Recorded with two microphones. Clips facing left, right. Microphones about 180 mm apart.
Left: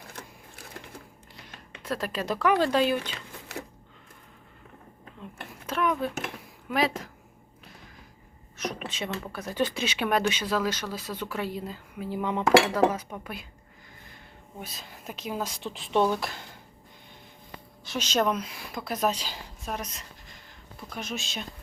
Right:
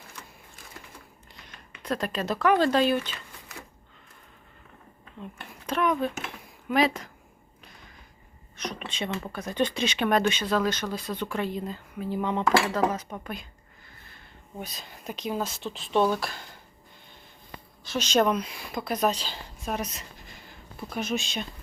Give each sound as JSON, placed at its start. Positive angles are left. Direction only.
{"t": 1.8, "sound": "speech", "side_deg": 5}
{"t": 3.0, "sound": "a sound", "side_deg": 70}
{"t": 5.6, "sound": "a woman's voice", "side_deg": 5}
{"t": 8.5, "sound": "a sound", "side_deg": 5}
{"t": 9.3, "sound": "speech", "side_deg": 5}
{"t": 14.6, "sound": "a woman's voice", "side_deg": 5}
{"t": 17.8, "sound": "a woman's voice", "side_deg": 10}
{"t": 19.7, "sound": "a woman's voice", "side_deg": -5}